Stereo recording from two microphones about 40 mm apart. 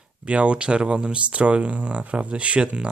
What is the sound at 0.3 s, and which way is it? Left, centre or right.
Speech, right.